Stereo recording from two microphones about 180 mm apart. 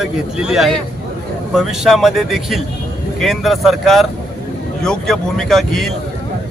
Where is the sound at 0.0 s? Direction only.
Centre (ahead or behind).